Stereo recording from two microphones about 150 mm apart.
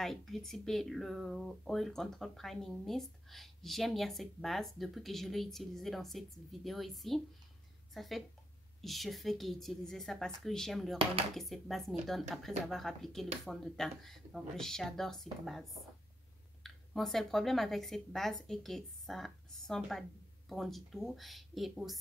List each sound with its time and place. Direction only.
0.0 s a woman's voice: centre (ahead or behind)